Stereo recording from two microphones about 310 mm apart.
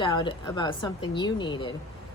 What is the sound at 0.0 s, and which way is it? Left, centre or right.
Speech, centre.